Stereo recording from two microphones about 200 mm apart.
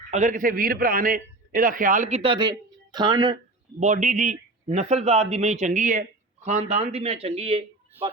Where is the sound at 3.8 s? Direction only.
35° right (ahead or behind).